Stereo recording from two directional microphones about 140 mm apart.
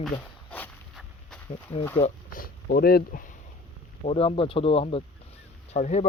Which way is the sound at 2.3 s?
90° left.